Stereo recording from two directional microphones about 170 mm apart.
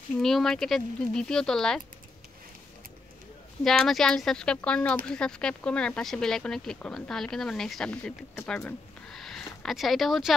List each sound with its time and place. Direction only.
0.2 s speech: centre (ahead or behind)
3.6 s speech: centre (ahead or behind)
9.1 s a sound: centre (ahead or behind)